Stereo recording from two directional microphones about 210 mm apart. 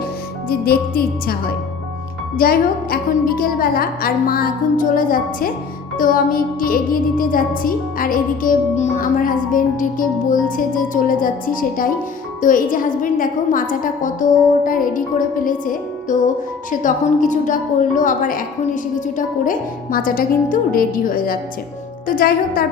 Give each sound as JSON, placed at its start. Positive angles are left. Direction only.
{"t": 0.4, "sound": "a woman's voice", "side_deg": 45}
{"t": 2.4, "sound": "a woman's voice", "side_deg": 45}